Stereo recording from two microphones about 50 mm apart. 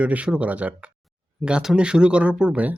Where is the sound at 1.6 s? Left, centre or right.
Centre.